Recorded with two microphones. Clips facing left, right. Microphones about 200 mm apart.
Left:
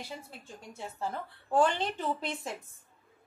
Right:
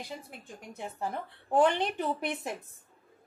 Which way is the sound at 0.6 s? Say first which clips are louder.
Right 1 dB; 15° right (ahead or behind).